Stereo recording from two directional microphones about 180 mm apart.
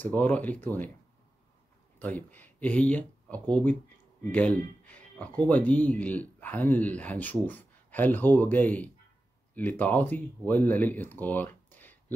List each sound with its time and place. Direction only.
0.0 s speech: 10° left (ahead or behind)
2.0 s speech: 10° left (ahead or behind)